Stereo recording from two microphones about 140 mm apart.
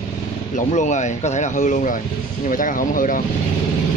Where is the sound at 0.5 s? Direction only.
60° left (ahead or behind); by 3.2 s 75° left (ahead or behind).